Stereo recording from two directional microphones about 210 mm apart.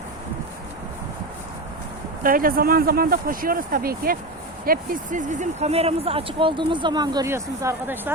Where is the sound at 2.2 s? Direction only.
40° right (ahead or behind).